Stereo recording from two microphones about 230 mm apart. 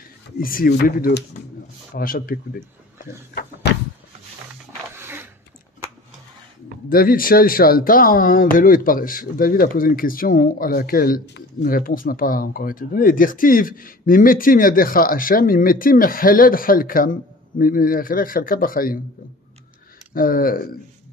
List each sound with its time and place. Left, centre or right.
0.4 s speech: left
4.9 s a sound: centre
6.9 s speech: left
20.2 s speech: left